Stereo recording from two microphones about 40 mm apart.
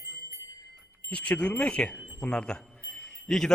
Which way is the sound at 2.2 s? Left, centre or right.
Left.